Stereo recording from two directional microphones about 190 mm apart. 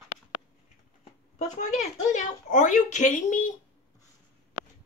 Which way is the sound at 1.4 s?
40° left (ahead or behind).